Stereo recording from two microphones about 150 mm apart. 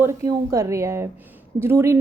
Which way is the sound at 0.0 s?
20° right (ahead or behind).